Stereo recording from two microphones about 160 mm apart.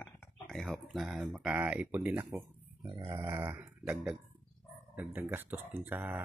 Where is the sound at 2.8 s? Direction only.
30° right (ahead or behind).